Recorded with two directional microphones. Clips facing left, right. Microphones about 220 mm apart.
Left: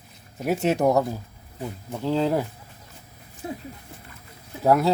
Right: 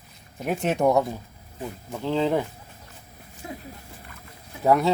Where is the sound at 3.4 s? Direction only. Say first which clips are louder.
Left 4 dB; 30° left (ahead or behind).